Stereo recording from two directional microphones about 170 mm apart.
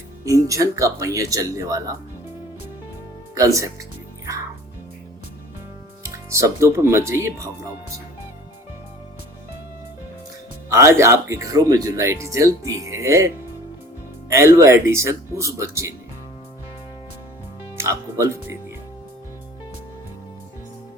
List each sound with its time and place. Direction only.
0.3 s speech: 20° right (ahead or behind)
3.3 s speech: 20° right (ahead or behind)
6.3 s speech: 15° right (ahead or behind)
10.7 s speech: 15° right (ahead or behind)
17.7 s speech: 15° right (ahead or behind)